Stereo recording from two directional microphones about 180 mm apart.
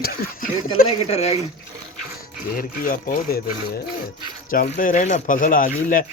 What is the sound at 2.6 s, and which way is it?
Speech, 55° left (ahead or behind).